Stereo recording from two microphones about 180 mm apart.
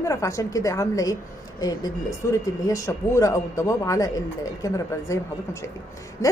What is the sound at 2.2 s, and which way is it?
A woman's voice, 15° left (ahead or behind).